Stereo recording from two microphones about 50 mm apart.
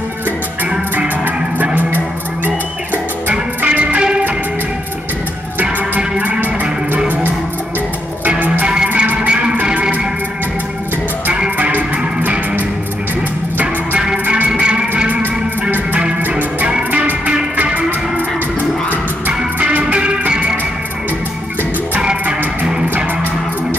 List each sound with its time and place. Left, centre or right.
0.9 s music: right
3.6 s music: right
5.9 s music: right
6.4 s music: right
8.8 s music: right
11.5 s music: right
14.1 s music: right
14.5 s music: centre
16.3 s music: right
16.9 s music: right
17.7 s music: right
19.6 s music: right
22.2 s music: right